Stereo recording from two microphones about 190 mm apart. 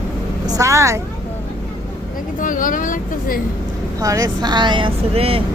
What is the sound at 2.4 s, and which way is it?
Speech, 45° left (ahead or behind).